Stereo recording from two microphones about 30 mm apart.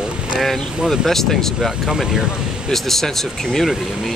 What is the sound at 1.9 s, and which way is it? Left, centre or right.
Speech, centre.